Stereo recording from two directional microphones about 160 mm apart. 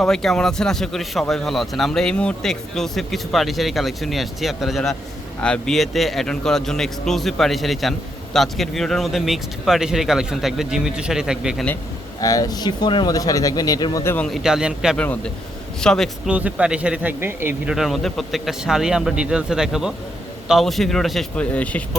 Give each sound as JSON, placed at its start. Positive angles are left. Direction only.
{"t": 0.0, "sound": "a man's voice", "side_deg": 5}
{"t": 12.2, "sound": "speech", "side_deg": 20}
{"t": 14.3, "sound": "a man's voice", "side_deg": 0}
{"t": 14.9, "sound": "a man's voice", "side_deg": 10}
{"t": 16.3, "sound": "speech", "side_deg": -5}
{"t": 17.7, "sound": "a man's voice", "side_deg": 0}